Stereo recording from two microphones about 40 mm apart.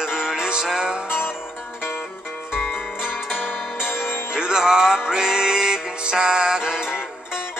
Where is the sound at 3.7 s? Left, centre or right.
Left.